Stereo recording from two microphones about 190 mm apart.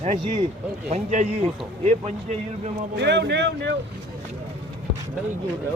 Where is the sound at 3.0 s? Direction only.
60° right (ahead or behind).